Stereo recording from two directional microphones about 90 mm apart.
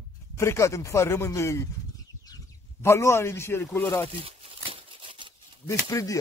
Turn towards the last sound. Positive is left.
turn(degrees=40)  # may be behind; listen again after turning